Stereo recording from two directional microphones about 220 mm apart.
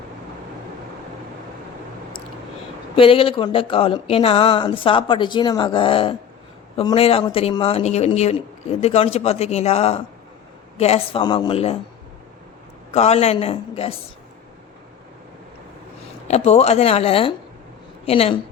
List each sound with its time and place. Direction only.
2.9 s speech: 25° left (ahead or behind)
12.9 s speech: 30° left (ahead or behind)
16.3 s speech: 30° left (ahead or behind)